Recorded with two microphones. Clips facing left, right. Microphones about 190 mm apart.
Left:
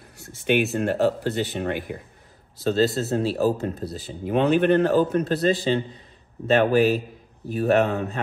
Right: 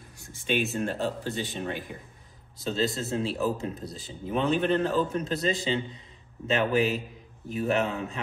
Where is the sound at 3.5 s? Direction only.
65° left (ahead or behind).